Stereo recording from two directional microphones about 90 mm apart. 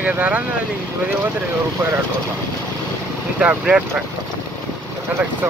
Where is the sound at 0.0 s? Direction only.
15° right (ahead or behind).